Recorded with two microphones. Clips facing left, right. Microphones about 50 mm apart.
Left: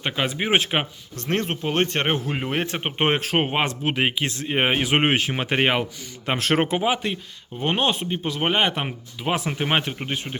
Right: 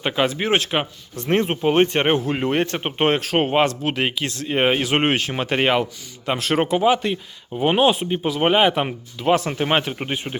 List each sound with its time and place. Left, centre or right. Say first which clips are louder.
0.0 s speech: right 4 dB; centre
0.5 s speech: right 1 dB; centre
1.1 s speech: right 5 dB; centre
3.0 s speech: right 3 dB; left
3.3 s speech: right 4 dB; centre
6.2 s speech: right 1 dB; left
6.6 s speech: right 3 dB; left
6.8 s speech: right 5 dB; centre
7.6 s speech: right 5 dB; centre
10.0 s speech: right 3 dB; centre